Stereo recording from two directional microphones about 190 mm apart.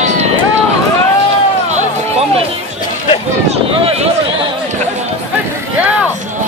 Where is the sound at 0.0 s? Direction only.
35° right (ahead or behind).